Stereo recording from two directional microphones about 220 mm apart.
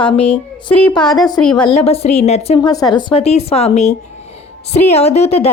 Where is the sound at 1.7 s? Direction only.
25° left (ahead or behind).